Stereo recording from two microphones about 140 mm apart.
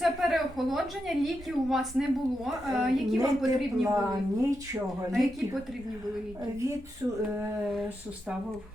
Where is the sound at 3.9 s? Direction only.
20° right (ahead or behind).